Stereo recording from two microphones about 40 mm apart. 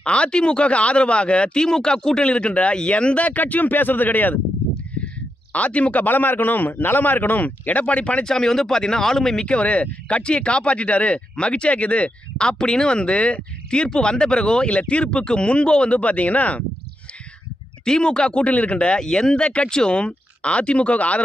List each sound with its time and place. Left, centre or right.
0.0 s speech: left
3.3 s a man's voice: left
5.5 s speech: left
6.0 s a man's voice: left
8.2 s speech: centre
9.5 s speech: left
12.4 s speech: centre; by 16.6 s left
17.8 s speech: left
18.5 s speech: left
18.9 s speech: centre; by 21.2 s left